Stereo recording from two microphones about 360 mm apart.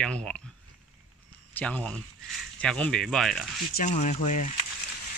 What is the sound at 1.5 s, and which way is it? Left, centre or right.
Speech, centre.